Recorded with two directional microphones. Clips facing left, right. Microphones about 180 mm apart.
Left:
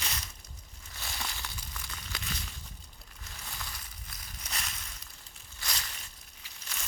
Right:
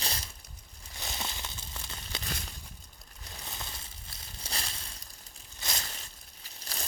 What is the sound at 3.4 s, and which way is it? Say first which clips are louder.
Crushing: right 1 dB; 20° right (ahead or behind).